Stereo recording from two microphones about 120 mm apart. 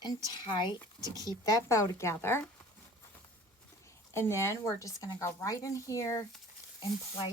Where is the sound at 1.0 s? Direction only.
30° right (ahead or behind).